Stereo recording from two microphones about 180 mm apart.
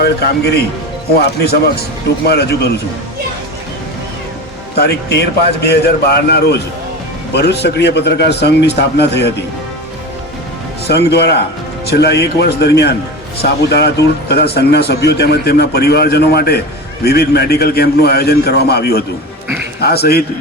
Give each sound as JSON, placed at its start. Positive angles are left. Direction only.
{"t": 0.0, "sound": "speech", "side_deg": 60}
{"t": 2.2, "sound": "speech", "side_deg": 65}
{"t": 4.7, "sound": "a man's voice", "side_deg": 65}
{"t": 10.8, "sound": "a man's voice", "side_deg": 65}